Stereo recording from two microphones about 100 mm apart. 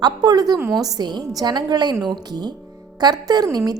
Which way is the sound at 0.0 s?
45° right (ahead or behind).